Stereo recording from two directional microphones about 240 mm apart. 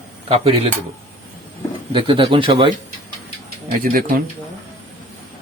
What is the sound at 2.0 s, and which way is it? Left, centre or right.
Speech, right.